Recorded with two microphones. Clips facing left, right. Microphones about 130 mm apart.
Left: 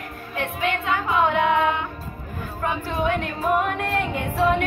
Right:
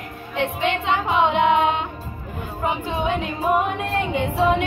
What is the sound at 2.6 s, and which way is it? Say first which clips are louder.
Carnatic music: right 1 dB; 15° right (ahead or behind).